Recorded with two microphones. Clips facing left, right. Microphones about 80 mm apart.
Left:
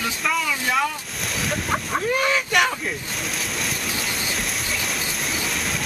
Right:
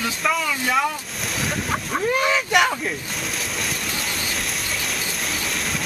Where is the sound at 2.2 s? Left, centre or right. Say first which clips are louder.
Right 2 dB; centre.